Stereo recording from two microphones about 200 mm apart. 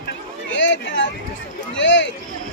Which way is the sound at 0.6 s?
65° left (ahead or behind).